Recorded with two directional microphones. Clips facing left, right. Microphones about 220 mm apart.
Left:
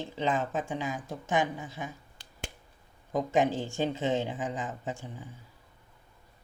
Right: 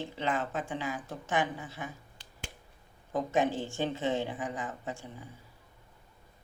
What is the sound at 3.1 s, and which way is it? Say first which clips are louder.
Speech: left 2 dB; 15° left (ahead or behind).